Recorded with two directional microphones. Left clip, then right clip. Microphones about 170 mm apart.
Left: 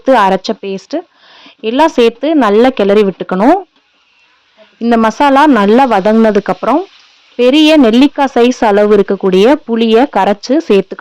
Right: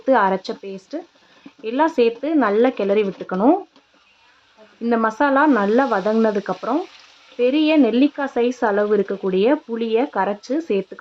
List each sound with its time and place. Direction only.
0.0 s speech: 50° left (ahead or behind)
4.9 s speech: 50° left (ahead or behind)